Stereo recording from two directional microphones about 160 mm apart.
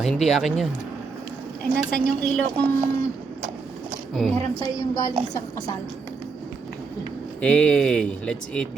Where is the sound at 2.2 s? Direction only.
5° left (ahead or behind).